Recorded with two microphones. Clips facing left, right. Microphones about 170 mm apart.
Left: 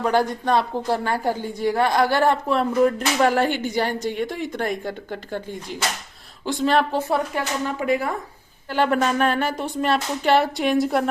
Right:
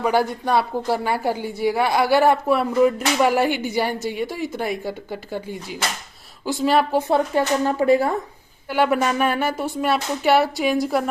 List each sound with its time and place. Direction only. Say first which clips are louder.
0.0 s speech: even; 10° right (ahead or behind)
7.1 s speech: right 5 dB; 30° right (ahead or behind)
8.7 s speech: right 1 dB; 10° right (ahead or behind)